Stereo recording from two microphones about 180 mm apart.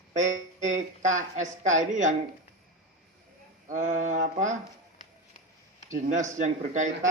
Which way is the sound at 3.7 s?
40° right (ahead or behind).